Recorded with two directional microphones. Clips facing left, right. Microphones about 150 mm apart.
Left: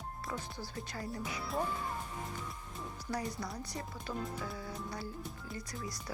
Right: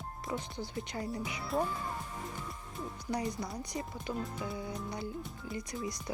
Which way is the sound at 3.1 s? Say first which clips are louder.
Right 3 dB; 20° right (ahead or behind).